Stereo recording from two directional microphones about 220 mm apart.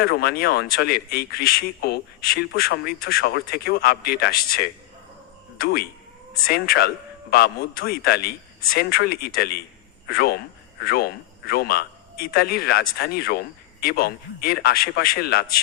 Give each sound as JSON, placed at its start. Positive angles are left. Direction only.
{"t": 0.0, "sound": "a man's voice", "side_deg": 45}